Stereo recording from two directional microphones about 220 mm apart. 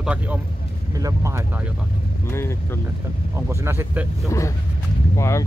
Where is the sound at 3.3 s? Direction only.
10° right (ahead or behind).